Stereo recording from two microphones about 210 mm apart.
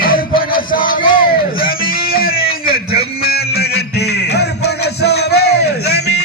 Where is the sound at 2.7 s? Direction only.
45° left (ahead or behind).